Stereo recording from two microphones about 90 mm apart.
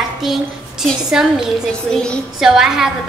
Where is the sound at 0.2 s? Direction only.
5° right (ahead or behind).